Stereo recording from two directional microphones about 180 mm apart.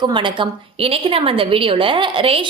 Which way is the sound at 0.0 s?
25° right (ahead or behind).